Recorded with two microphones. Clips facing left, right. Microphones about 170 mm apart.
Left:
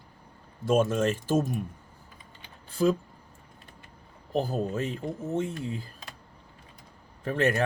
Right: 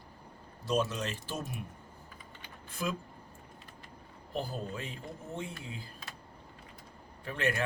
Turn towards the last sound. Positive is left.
turn(degrees=40)  # may be behind; listen again after turning